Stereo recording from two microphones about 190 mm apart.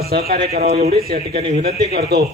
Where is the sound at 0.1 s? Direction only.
55° right (ahead or behind).